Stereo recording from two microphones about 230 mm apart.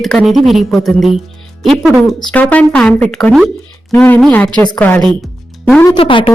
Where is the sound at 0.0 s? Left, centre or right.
Centre.